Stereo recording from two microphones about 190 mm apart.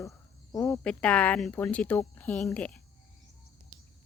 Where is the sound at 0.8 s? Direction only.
5° left (ahead or behind).